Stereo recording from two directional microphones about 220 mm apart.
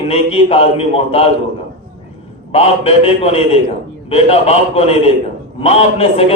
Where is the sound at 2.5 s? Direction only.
25° left (ahead or behind).